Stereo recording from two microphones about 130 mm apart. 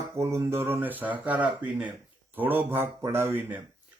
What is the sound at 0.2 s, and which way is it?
Speech, 20° right (ahead or behind).